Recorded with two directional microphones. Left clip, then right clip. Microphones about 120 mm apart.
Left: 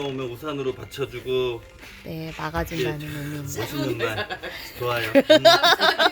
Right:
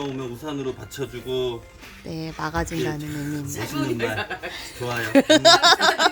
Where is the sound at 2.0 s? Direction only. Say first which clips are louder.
Right 2 dB; 10° right (ahead or behind).